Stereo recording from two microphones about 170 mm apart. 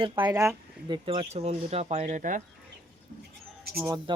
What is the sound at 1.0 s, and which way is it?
Speech, 35° right (ahead or behind).